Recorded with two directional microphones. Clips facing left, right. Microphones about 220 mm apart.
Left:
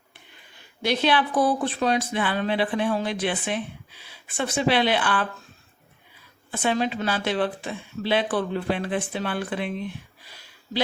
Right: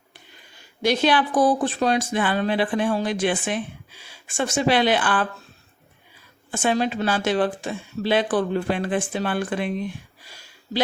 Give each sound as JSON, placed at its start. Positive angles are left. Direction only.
{"t": 0.9, "sound": "a woman's voice", "side_deg": -45}
{"t": 6.5, "sound": "a woman's voice", "side_deg": -45}